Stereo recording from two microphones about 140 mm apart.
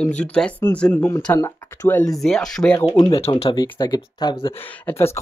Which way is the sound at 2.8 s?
35° left (ahead or behind).